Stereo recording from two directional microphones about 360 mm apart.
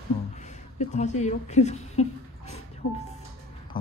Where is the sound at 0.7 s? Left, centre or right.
Centre.